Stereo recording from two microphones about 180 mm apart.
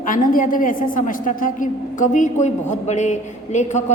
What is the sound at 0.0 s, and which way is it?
A woman's voice, 50° left (ahead or behind).